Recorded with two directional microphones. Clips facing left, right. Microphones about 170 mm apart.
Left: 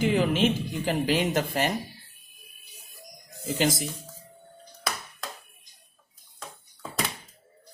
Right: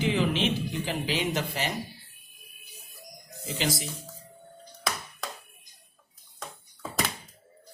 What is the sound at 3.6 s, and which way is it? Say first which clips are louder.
Speech: left 4 dB; 45° left (ahead or behind).